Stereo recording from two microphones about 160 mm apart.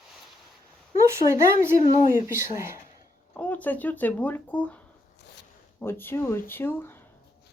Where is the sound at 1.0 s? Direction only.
15° right (ahead or behind).